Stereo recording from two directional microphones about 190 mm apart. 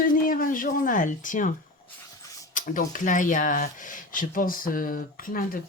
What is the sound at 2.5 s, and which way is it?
Speech, 45° left (ahead or behind).